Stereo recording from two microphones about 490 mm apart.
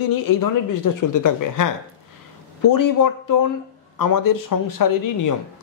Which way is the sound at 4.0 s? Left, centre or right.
Left.